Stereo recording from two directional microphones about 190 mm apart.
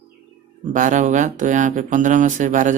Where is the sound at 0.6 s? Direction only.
40° right (ahead or behind).